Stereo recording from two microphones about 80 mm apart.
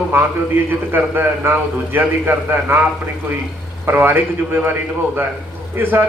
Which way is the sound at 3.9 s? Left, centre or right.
Right.